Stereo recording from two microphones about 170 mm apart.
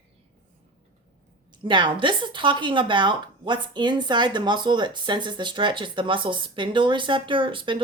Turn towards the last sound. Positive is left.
turn(degrees=-30)  # may be behind; listen again after turning